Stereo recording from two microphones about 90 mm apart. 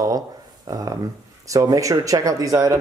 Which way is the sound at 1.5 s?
40° right (ahead or behind).